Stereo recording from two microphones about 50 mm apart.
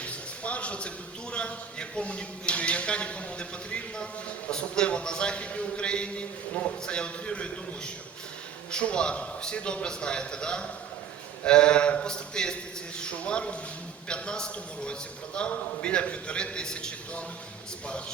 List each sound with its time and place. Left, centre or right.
0.0 s a man's voice: left
8.7 s a man's voice: left